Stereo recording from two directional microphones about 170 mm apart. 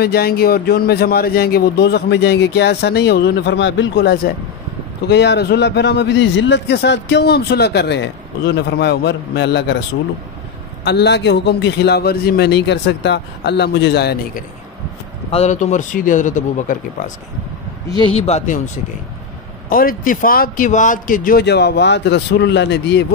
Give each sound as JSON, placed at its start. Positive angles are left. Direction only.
{"t": 0.0, "sound": "a man's voice", "side_deg": 65}
{"t": 5.0, "sound": "a man's voice", "side_deg": 90}
{"t": 10.8, "sound": "a man's voice", "side_deg": 75}
{"t": 15.3, "sound": "speech", "side_deg": 45}
{"t": 17.8, "sound": "speech", "side_deg": 30}
{"t": 19.7, "sound": "speech", "side_deg": 55}